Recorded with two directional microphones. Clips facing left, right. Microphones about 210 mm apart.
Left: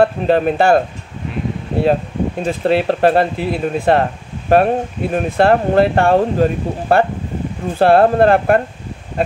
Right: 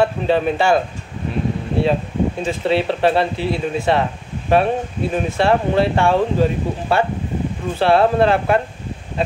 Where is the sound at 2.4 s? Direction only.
50° left (ahead or behind).